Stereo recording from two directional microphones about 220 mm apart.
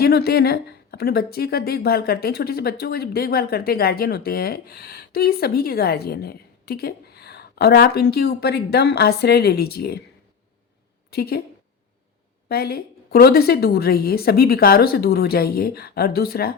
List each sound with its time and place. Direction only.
0.0 s speech: 45° left (ahead or behind)
11.1 s speech: 45° left (ahead or behind)
12.5 s speech: 45° left (ahead or behind)